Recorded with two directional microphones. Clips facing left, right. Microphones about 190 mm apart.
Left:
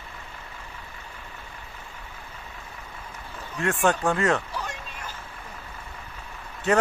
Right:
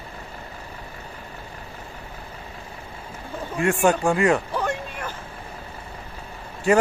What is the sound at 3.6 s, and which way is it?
Speech, 15° right (ahead or behind).